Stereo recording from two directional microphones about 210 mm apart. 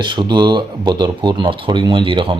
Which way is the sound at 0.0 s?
20° right (ahead or behind).